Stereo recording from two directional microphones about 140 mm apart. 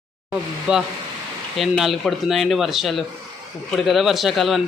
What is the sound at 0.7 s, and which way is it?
Speech, 5° right (ahead or behind).